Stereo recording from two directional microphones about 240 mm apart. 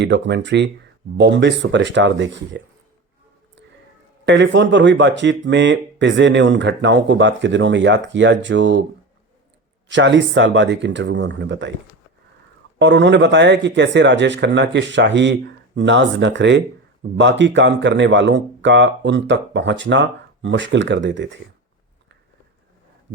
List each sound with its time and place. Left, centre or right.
0.0 s speech: right
4.3 s speech: right
9.9 s speech: right
12.8 s speech: right